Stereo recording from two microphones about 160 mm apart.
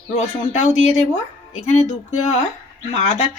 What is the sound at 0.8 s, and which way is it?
Speech, 45° left (ahead or behind).